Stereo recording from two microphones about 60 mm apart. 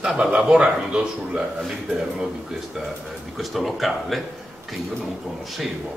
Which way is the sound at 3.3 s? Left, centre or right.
Centre.